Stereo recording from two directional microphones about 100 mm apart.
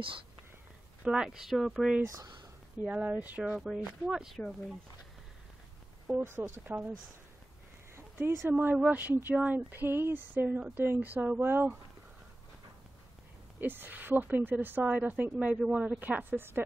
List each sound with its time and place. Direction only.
1.0 s speech: 5° right (ahead or behind)
2.8 s speech: 15° right (ahead or behind)
3.6 s speech: 5° right (ahead or behind)
6.1 s speech: 20° right (ahead or behind)
7.9 s a sound: 25° right (ahead or behind)
8.5 s speech: 20° right (ahead or behind)
13.6 s speech: 20° right (ahead or behind)